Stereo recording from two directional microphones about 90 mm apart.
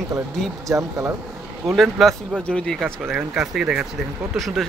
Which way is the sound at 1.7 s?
Centre (ahead or behind).